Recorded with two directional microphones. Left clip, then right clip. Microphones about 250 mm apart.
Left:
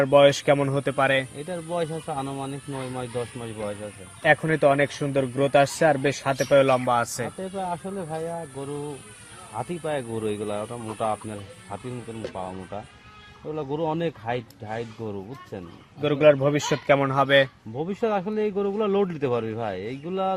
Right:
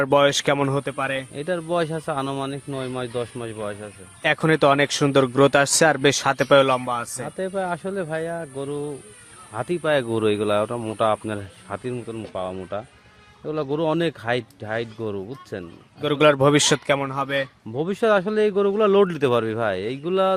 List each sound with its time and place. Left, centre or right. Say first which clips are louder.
0.0 s speech: left 1 dB; right
0.9 s speech: left 4 dB; centre
1.4 s speech: right 5 dB; right
4.2 s speech: right 1 dB; centre
6.8 s speech: left 3 dB; centre
7.4 s speech: right 9 dB; right
9.6 s speech: right 7 dB; right
16.1 s speech: right 2 dB; right
17.0 s speech: left 5 dB; centre
17.7 s speech: right 6 dB; right